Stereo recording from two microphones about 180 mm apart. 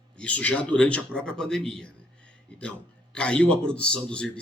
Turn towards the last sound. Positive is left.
turn(degrees=5)  # may be behind; listen again after turning